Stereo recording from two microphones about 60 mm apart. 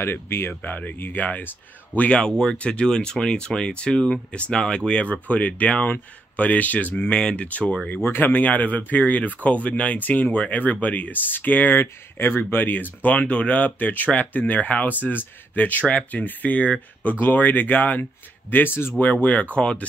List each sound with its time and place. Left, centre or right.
0.0 s speech: left
7.1 s speech: centre
7.9 s speech: left; by 19.9 s centre